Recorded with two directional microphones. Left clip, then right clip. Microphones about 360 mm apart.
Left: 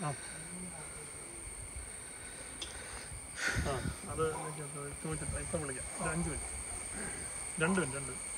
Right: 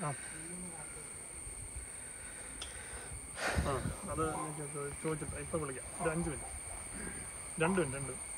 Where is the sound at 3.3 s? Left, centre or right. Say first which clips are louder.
Even; centre.